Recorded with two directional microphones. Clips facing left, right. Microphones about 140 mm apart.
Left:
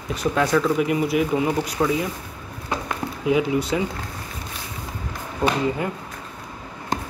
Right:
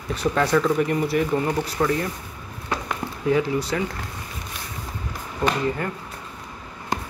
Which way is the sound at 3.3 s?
15° left (ahead or behind).